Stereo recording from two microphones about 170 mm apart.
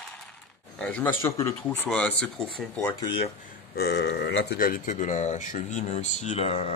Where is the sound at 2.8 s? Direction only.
25° left (ahead or behind).